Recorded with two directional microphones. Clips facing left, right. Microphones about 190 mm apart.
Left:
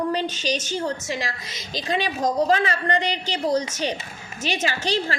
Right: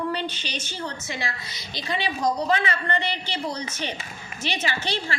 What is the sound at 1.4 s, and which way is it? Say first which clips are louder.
Speech: left 5 dB; 90° left.